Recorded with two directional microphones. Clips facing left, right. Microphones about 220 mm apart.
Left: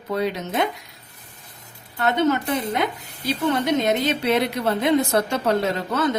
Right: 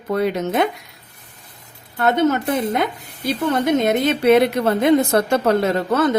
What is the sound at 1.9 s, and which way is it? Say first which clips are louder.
Speech: right 3 dB; 50° right (ahead or behind).